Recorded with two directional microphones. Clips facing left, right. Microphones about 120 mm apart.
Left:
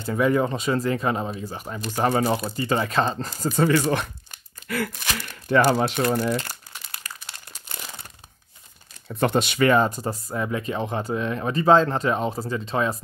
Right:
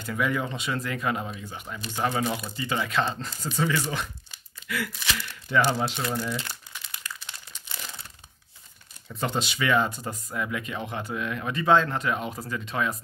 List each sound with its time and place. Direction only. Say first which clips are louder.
0.0 s speech: left 7 dB; 35° left (ahead or behind); by 6.6 s 55° left (ahead or behind)
7.2 s crumpling: left 1 dB; 50° left (ahead or behind)
9.1 s speech: left 7 dB; 55° left (ahead or behind); by 13.0 s 30° left (ahead or behind)